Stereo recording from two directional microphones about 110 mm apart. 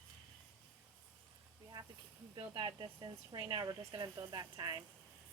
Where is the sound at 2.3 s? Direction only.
45° right (ahead or behind).